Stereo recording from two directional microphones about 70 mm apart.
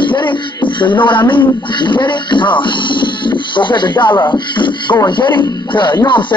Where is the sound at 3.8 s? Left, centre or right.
Left.